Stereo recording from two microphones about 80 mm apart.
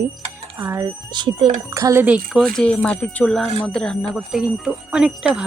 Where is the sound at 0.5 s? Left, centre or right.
Right.